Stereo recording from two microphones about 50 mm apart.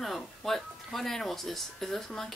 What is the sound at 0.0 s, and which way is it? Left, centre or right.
Speech, centre.